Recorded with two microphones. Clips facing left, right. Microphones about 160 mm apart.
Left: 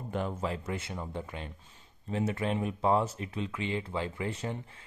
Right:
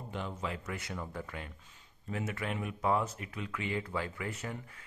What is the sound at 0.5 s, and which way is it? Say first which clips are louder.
Speech: left 4 dB; 25° left (ahead or behind).